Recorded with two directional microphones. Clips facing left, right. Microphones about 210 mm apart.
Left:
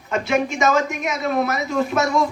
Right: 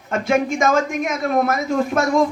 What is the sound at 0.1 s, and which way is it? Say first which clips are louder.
A man's voice: right 2 dB; 50° right (ahead or behind).